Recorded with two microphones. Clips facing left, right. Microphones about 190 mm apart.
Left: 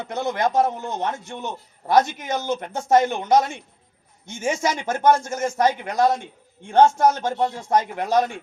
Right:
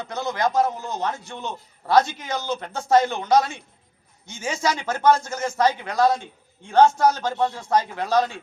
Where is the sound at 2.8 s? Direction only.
20° left (ahead or behind).